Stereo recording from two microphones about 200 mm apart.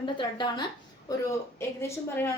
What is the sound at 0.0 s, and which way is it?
A woman's voice, 20° left (ahead or behind).